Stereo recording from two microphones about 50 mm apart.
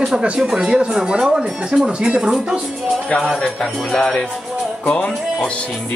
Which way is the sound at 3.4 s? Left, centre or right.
Centre.